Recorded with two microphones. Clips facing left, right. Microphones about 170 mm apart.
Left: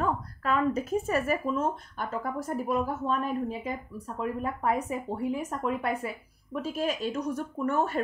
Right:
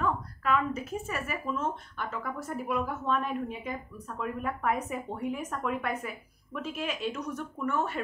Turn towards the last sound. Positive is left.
turn(degrees=40)  # may be behind; listen again after turning